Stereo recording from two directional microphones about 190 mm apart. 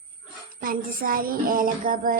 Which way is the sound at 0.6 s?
50° right (ahead or behind).